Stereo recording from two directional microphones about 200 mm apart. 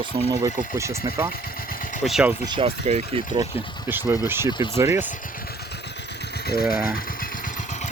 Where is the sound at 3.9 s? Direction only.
10° right (ahead or behind).